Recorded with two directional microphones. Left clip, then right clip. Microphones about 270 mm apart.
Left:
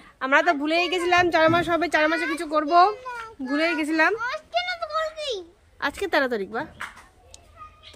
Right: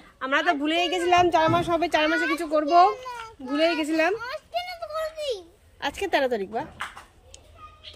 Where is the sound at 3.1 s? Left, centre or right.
Right.